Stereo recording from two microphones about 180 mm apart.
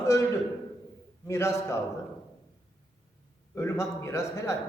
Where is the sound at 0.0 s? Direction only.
15° left (ahead or behind).